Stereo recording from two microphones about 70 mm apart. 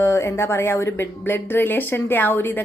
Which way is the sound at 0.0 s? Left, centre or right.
Left.